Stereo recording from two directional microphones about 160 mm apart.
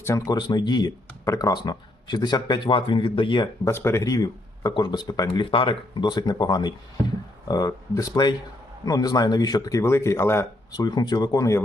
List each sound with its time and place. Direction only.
0.0 s speech: 20° left (ahead or behind)
3.6 s speech: 15° left (ahead or behind)